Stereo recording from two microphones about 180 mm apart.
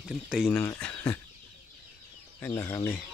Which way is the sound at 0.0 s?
5° right (ahead or behind).